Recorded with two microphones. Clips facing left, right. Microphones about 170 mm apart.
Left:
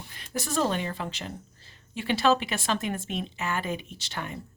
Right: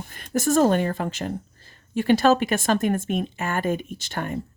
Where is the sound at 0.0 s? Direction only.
50° right (ahead or behind).